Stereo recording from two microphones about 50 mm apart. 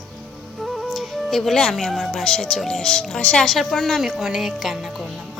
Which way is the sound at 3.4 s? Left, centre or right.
Centre.